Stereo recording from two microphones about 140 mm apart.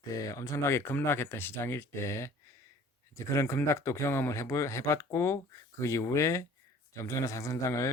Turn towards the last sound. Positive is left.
turn(degrees=20)  # may be behind; listen again after turning